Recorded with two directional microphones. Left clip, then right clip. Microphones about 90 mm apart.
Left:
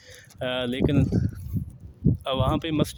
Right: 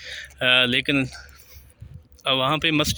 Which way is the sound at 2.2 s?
35° left (ahead or behind).